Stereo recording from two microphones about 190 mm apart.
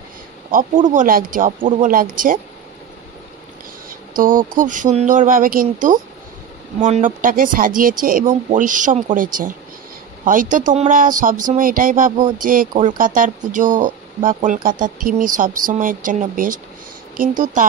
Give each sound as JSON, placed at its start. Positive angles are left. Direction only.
{"t": 0.5, "sound": "speech", "side_deg": -45}
{"t": 4.2, "sound": "speech", "side_deg": -45}
{"t": 12.2, "sound": "speech", "side_deg": -25}
{"t": 12.7, "sound": "speech", "side_deg": -45}